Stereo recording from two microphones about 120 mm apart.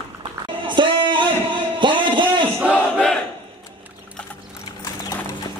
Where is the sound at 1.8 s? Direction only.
40° right (ahead or behind).